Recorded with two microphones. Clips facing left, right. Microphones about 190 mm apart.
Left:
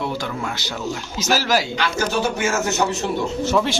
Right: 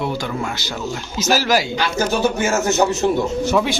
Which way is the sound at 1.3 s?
10° right (ahead or behind).